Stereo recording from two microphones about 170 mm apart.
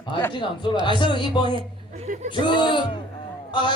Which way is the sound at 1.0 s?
30° left (ahead or behind).